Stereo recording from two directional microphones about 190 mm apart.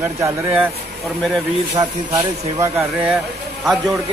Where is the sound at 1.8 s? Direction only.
15° right (ahead or behind).